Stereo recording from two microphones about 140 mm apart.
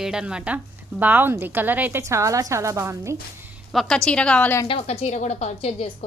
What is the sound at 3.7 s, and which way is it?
Speech, centre (ahead or behind).